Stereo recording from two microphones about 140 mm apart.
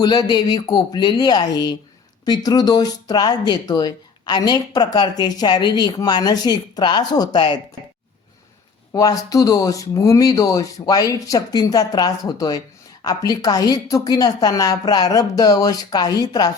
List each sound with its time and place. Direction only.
0.0 s speech: 30° left (ahead or behind)
8.9 s speech: 25° left (ahead or behind)